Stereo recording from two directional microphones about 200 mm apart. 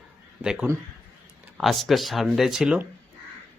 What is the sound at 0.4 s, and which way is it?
Speech, 5° right (ahead or behind).